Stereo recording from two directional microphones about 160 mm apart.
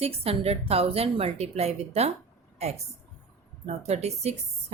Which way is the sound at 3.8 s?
40° right (ahead or behind).